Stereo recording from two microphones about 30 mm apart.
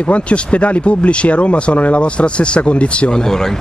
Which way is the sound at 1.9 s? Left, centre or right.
Left.